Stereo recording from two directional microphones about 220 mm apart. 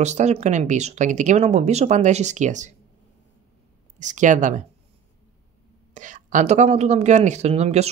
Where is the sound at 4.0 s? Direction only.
35° right (ahead or behind).